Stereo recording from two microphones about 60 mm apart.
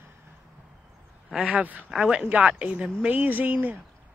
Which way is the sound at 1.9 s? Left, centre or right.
Centre.